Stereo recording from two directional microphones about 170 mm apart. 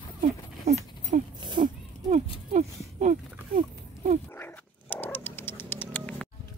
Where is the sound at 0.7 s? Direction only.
40° right (ahead or behind).